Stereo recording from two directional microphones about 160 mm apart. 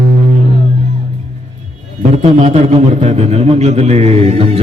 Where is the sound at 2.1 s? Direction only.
40° right (ahead or behind).